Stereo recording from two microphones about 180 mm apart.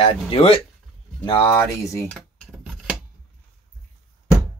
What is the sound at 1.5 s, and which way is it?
Speech, 15° left (ahead or behind).